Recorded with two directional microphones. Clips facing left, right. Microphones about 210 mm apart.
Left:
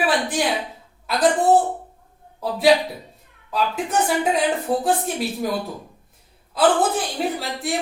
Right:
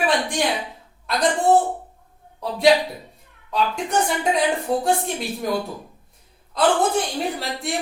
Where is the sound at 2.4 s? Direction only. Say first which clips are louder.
Even; centre (ahead or behind).